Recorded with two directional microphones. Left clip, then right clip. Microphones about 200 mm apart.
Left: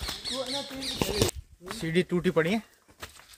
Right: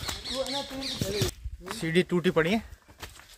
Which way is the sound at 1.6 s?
5° right (ahead or behind).